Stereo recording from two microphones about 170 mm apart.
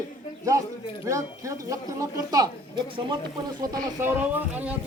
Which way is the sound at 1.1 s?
20° right (ahead or behind).